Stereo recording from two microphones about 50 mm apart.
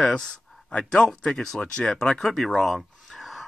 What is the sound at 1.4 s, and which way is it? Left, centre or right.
Speech, centre.